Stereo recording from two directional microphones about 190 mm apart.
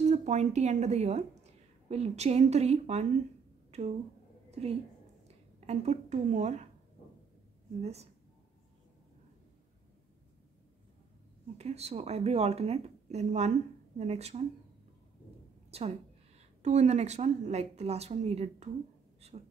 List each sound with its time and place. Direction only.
0.0 s a woman's voice: 40° right (ahead or behind)
4.5 s a sound: 35° right (ahead or behind)
5.3 s a woman's voice: 35° right (ahead or behind)
7.8 s speech: 35° right (ahead or behind)
11.5 s speech: 35° right (ahead or behind)
16.6 s speech: 35° right (ahead or behind)